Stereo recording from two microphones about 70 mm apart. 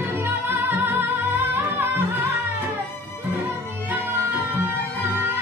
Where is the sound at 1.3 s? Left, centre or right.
Right.